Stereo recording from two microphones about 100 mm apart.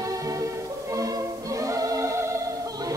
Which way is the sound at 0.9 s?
35° right (ahead or behind).